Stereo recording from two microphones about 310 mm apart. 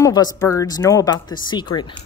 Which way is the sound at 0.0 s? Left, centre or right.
Centre.